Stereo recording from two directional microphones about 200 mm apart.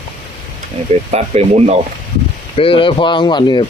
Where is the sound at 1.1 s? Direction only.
30° right (ahead or behind).